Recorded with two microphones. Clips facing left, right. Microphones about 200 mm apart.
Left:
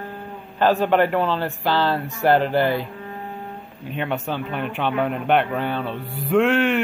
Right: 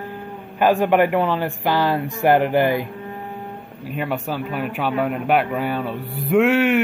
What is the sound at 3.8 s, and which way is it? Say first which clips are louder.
A man's voice: right 1 dB; 5° right (ahead or behind).